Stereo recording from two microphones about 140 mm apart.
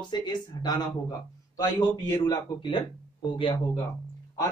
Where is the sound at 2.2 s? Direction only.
30° left (ahead or behind).